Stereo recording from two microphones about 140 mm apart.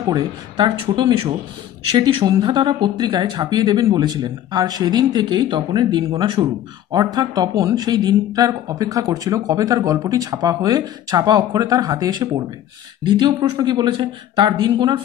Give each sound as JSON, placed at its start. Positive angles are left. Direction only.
{"t": 0.0, "sound": "speech", "side_deg": -35}